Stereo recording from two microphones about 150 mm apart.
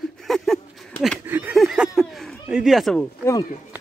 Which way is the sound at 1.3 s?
10° right (ahead or behind).